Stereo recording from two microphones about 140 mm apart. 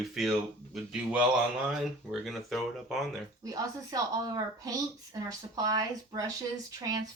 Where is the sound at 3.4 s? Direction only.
25° right (ahead or behind).